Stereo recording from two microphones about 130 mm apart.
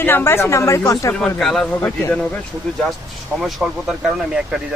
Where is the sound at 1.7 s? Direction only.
15° left (ahead or behind).